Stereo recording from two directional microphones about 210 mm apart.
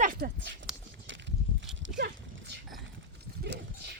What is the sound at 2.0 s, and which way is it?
Livestock, 55° right (ahead or behind).